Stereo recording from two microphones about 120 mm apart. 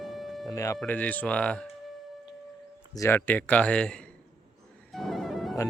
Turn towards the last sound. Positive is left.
turn(degrees=0)  # may be behind; listen again after turning